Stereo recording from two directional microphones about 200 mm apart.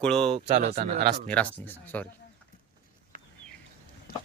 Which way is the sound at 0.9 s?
55° right (ahead or behind).